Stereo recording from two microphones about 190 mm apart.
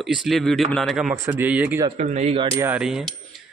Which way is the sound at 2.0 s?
35° right (ahead or behind).